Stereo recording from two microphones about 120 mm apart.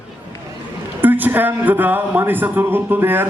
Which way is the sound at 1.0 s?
15° right (ahead or behind).